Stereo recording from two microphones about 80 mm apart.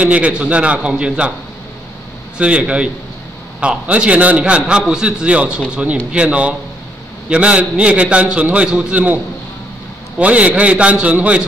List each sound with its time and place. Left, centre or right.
0.0 s a man's voice: centre
2.3 s a man's voice: centre